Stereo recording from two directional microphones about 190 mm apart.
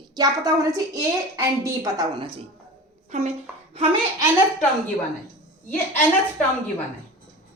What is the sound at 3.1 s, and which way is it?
Speech, 35° right (ahead or behind).